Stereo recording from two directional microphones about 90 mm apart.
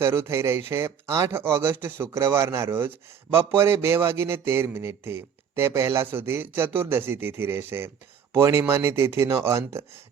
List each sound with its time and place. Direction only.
0.0 s a man's voice: 30° right (ahead or behind)